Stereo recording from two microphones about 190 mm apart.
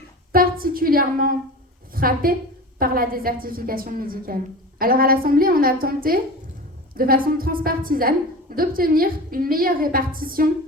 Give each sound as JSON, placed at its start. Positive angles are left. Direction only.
{"t": 0.3, "sound": "a woman's voice", "side_deg": -50}